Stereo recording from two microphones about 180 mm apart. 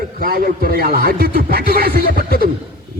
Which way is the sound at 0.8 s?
55° right (ahead or behind).